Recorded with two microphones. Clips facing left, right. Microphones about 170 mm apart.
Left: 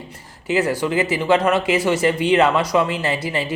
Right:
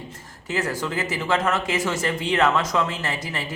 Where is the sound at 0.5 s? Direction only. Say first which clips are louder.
Left 7 dB; 20° left (ahead or behind).